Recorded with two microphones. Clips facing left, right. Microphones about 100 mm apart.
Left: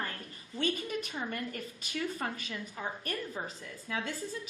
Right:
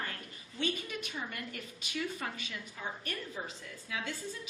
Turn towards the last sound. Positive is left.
turn(degrees=40)  # may be behind; listen again after turning